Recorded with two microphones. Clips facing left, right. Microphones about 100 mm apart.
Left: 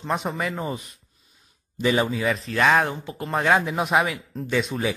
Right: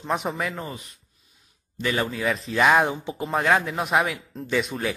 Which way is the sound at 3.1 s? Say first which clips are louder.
Left 1 dB; centre (ahead or behind).